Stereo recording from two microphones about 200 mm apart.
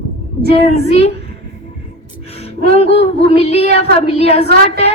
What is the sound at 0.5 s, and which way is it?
Speech, 30° left (ahead or behind).